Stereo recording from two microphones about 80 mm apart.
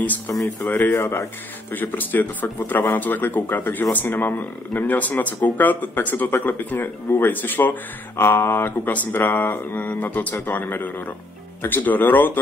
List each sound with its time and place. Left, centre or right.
0.6 s speech: left
0.9 s speech: left
1.8 s speech: left